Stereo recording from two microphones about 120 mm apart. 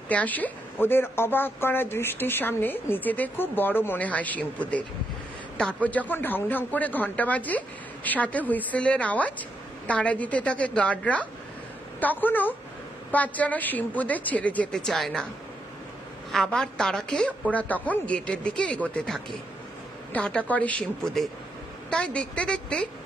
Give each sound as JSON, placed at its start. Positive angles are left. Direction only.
{"t": 0.1, "sound": "a man's voice", "side_deg": 15}
{"t": 16.3, "sound": "a woman's voice", "side_deg": 5}